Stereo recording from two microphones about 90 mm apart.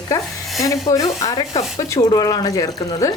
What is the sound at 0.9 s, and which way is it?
A woman's voice, 40° left (ahead or behind).